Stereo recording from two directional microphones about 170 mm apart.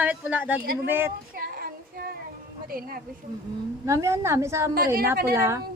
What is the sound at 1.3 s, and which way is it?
Child singing, 60° right (ahead or behind).